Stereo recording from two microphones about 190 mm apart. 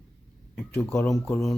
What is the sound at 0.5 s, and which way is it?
Speech, 5° left (ahead or behind).